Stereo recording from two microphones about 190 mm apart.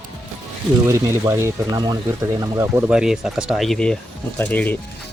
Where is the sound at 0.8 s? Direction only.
15° right (ahead or behind); by 4.8 s 10° left (ahead or behind).